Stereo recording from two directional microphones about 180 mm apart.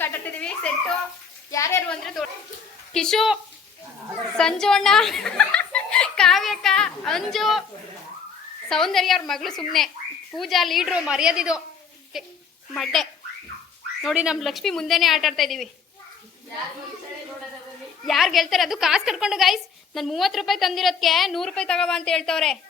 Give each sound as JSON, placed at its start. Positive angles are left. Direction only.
{"t": 0.0, "sound": "a sound", "side_deg": 10}
{"t": 1.5, "sound": "a woman's voice", "side_deg": 15}
{"t": 1.9, "sound": "a woman's voice", "side_deg": 0}
{"t": 4.4, "sound": "a woman's voice", "side_deg": 5}
{"t": 8.7, "sound": "a woman's voice", "side_deg": 0}
{"t": 18.0, "sound": "a woman's voice", "side_deg": 0}